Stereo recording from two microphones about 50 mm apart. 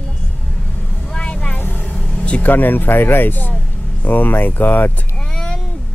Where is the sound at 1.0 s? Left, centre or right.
Centre.